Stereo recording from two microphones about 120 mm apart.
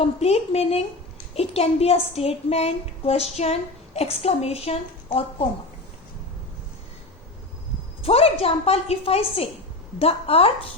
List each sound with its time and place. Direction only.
0.0 s a woman's voice: 60° left (ahead or behind)
8.0 s a woman's voice: 55° left (ahead or behind)